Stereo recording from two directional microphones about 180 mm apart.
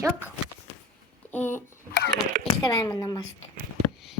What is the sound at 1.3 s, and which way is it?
Speech, 10° left (ahead or behind).